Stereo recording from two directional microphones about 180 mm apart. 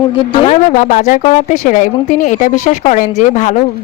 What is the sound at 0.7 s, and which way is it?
A woman's voice, 45° left (ahead or behind).